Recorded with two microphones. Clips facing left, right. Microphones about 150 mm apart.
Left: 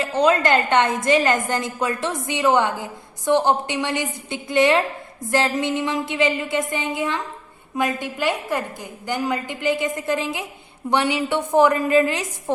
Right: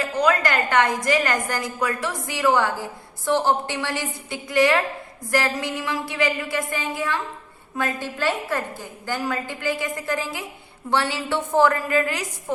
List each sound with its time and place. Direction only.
0.0 s a woman's voice: 25° left (ahead or behind)